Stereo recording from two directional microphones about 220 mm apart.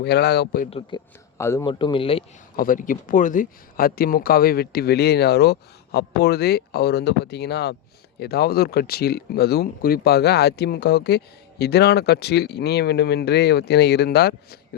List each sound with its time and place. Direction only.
0.0 s speech: 50° left (ahead or behind)
0.7 s speech: 20° left (ahead or behind)
2.6 s speech: 35° left (ahead or behind)